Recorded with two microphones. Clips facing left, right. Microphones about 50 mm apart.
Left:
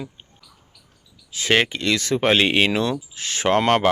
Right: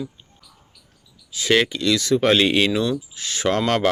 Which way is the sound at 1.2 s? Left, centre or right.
Left.